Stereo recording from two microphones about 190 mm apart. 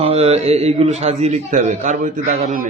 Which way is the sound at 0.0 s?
35° right (ahead or behind).